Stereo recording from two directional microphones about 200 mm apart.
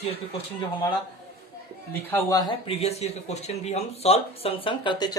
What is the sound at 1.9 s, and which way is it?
Speech, 10° left (ahead or behind).